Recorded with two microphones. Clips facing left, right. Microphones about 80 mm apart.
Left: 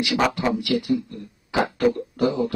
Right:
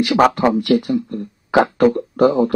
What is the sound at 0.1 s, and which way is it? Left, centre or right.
Speech, right.